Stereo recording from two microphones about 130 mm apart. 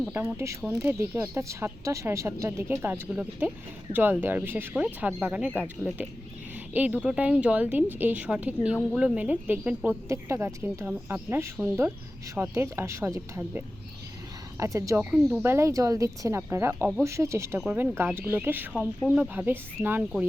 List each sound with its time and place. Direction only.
0.1 s a woman's voice: 15° right (ahead or behind)
17.6 s speech: 10° right (ahead or behind)